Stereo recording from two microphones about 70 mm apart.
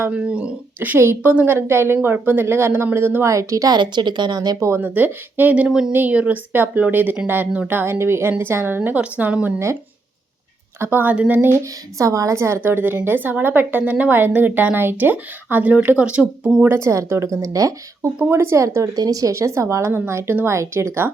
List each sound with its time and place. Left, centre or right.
0.1 s speech: centre
0.9 s a woman's voice: right
3.2 s speech: right
4.8 s speech: right
5.6 s speech: centre
5.9 s speech: right
7.7 s a woman's voice: right
10.8 s speech: right
11.5 s a woman's voice: right; by 16.5 s centre
16.6 s speech: right
18.9 s a woman's voice: right